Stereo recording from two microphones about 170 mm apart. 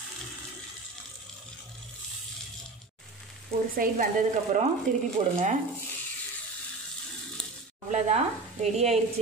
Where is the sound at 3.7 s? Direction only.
55° right (ahead or behind).